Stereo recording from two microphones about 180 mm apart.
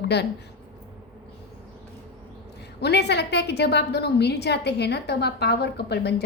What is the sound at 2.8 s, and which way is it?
A woman's voice, 70° left (ahead or behind).